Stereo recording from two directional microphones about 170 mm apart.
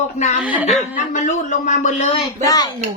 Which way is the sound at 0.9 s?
45° left (ahead or behind).